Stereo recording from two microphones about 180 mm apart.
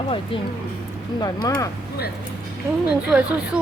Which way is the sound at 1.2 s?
20° left (ahead or behind).